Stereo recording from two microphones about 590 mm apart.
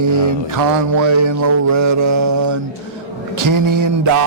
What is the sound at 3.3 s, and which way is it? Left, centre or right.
Speech, right.